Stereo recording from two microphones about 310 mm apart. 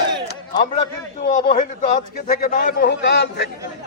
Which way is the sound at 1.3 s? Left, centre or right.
Left.